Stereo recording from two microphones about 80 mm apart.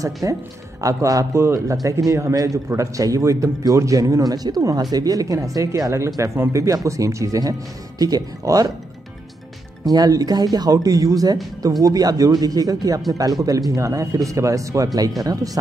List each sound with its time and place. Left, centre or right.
0.0 s speech: right
9.8 s speech: right